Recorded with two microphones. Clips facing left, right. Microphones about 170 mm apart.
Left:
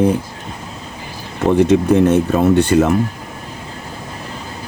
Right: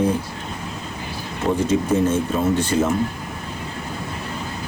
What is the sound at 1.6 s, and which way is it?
Speech, 70° left (ahead or behind).